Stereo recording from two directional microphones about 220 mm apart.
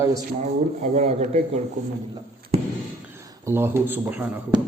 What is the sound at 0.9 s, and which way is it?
Speech, 30° right (ahead or behind).